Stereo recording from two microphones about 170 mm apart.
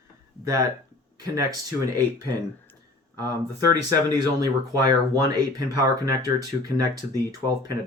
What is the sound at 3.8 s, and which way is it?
Speech, 20° right (ahead or behind).